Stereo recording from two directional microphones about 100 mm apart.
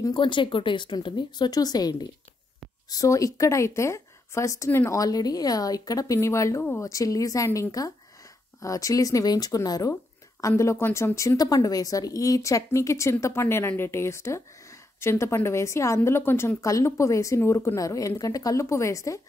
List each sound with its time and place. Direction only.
0.1 s a woman's voice: 55° left (ahead or behind); by 19.2 s 30° left (ahead or behind)